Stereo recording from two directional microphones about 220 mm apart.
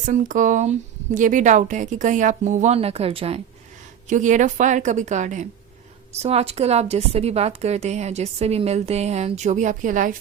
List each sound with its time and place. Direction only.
0.0 s a woman's voice: 35° right (ahead or behind)